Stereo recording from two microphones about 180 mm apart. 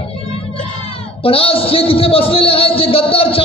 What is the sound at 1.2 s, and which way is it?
A man's voice, 30° left (ahead or behind).